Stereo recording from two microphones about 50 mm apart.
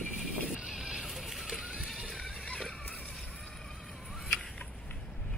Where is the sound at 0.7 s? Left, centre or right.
Centre.